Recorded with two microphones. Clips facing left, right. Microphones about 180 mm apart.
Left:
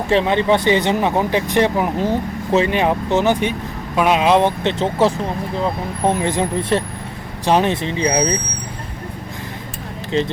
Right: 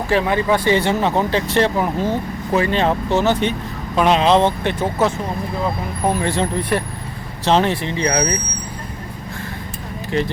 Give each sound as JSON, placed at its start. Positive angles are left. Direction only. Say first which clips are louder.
{"t": 0.1, "sound": "speech", "louder": "left 2 dB", "side_deg": 25}
{"t": 10.1, "sound": "speech", "louder": "left 1 dB", "side_deg": 20}